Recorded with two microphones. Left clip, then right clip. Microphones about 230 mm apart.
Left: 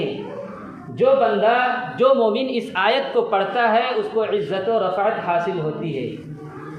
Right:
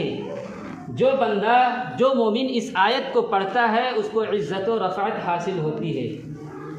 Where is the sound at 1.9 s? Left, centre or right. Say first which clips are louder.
Left 6 dB; right.